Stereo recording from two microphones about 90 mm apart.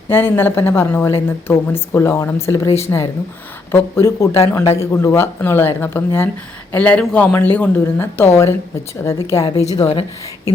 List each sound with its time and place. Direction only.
0.1 s a woman's voice: 25° left (ahead or behind)
9.8 s speech: 90° left